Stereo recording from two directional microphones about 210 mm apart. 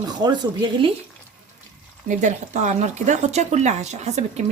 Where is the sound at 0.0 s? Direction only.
20° right (ahead or behind).